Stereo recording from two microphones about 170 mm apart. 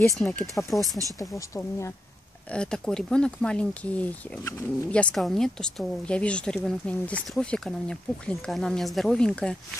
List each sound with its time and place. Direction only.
0.2 s speech: 10° left (ahead or behind)
1.2 s speech: 15° left (ahead or behind)
2.5 s speech: 5° left (ahead or behind)